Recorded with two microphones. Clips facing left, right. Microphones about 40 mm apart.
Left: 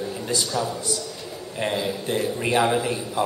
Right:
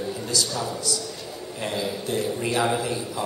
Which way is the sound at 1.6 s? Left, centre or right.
Left.